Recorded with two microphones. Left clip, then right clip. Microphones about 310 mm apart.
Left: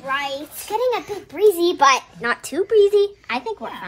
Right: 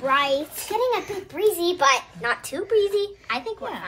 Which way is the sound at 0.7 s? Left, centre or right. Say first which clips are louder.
Left 2 dB; left.